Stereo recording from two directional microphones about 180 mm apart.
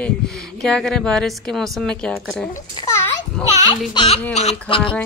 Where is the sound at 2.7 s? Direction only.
20° left (ahead or behind).